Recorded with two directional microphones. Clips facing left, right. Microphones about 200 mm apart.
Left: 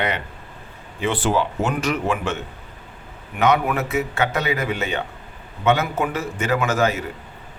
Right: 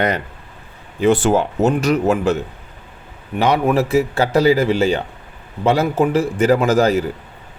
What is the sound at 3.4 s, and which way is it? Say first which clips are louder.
A man's voice: right 4 dB; 30° right (ahead or behind).